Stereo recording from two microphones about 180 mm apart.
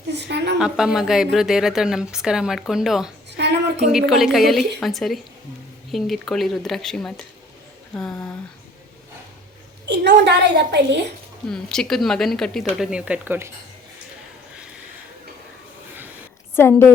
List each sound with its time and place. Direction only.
0.1 s a sound: 70° right (ahead or behind)
0.6 s a woman's voice: 5° right (ahead or behind)
9.8 s a woman's voice: 70° right (ahead or behind)
11.4 s a woman's voice: 5° left (ahead or behind)
16.6 s a woman's voice: 15° left (ahead or behind)